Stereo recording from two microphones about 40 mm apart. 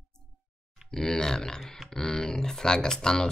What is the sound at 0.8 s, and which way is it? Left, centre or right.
Speech, centre.